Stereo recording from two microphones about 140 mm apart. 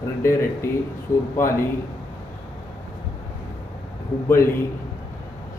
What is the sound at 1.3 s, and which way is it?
Speech, 20° left (ahead or behind).